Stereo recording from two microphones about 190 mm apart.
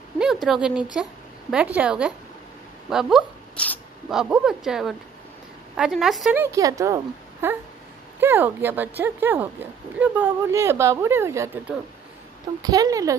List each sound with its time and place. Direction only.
0.2 s a woman's voice: centre (ahead or behind); by 13.1 s 20° right (ahead or behind)